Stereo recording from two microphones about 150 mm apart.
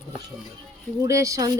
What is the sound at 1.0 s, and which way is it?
Speech, 20° right (ahead or behind).